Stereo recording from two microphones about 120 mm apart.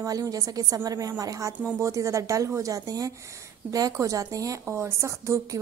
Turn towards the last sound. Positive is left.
turn(degrees=-25)  # may be behind; listen again after turning